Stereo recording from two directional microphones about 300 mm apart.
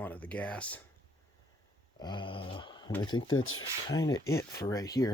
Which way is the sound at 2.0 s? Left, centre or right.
Centre.